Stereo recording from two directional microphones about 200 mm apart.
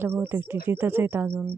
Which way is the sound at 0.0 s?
10° right (ahead or behind).